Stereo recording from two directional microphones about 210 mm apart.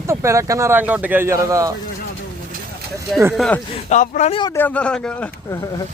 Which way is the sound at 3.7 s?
35° left (ahead or behind).